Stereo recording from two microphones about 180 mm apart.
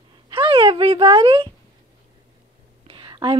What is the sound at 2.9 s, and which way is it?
Whispering, 25° right (ahead or behind).